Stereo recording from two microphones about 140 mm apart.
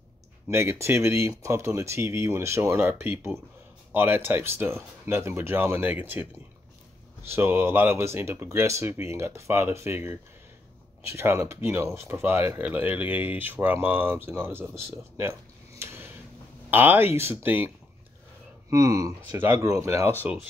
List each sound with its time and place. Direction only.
0.5 s speech: 20° right (ahead or behind)
7.2 s speech: 15° right (ahead or behind)
15.8 s tick-tock: 15° right (ahead or behind)
16.7 s speech: 15° right (ahead or behind)
18.7 s speech: 25° right (ahead or behind)